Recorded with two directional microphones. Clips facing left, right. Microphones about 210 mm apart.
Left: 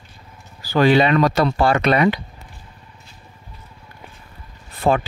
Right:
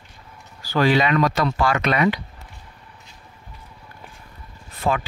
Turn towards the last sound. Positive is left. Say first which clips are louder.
# left 5 dB
turn(degrees=35)  # may be behind; listen again after turning